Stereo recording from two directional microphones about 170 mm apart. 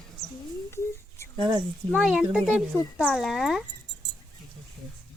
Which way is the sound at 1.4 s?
25° right (ahead or behind).